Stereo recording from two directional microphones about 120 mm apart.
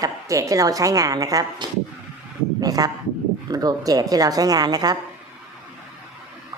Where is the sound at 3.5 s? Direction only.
35° right (ahead or behind).